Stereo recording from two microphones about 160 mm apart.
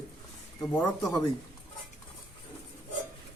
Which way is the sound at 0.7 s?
10° left (ahead or behind).